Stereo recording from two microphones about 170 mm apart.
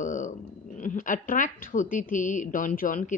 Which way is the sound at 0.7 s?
50° left (ahead or behind).